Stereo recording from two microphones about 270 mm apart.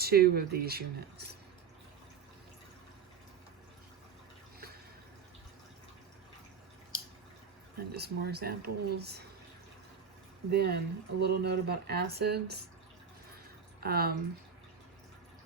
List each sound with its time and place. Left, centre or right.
0.0 s speech: right
7.8 s speech: right
10.5 s speech: right
13.8 s speech: right